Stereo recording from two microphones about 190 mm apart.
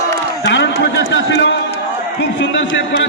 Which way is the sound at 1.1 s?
70° left (ahead or behind).